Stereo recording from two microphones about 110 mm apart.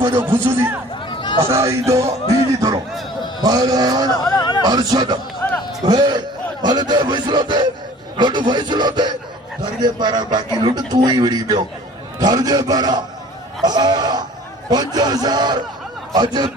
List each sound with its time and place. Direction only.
0.2 s speech: 20° right (ahead or behind)
1.1 s chatter: 45° left (ahead or behind)
1.5 s speech: 25° right (ahead or behind)
2.2 s a sound: 35° right (ahead or behind)
3.4 s a man's voice: 35° right (ahead or behind)
4.2 s a sound: 30° left (ahead or behind)
4.6 s a man's voice: 40° right (ahead or behind)
5.4 s a sound: 20° left (ahead or behind)
5.9 s a man's voice: 40° right (ahead or behind)